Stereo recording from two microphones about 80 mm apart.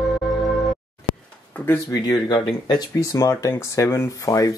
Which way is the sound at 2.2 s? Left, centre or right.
Left.